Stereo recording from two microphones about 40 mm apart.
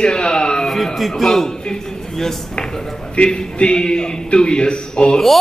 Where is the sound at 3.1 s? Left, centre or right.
Left.